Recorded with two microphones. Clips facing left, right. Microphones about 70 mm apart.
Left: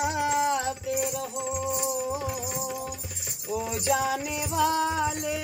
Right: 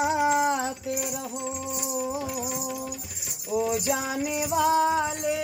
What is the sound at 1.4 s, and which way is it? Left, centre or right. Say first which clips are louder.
Music: left 3 dB; centre.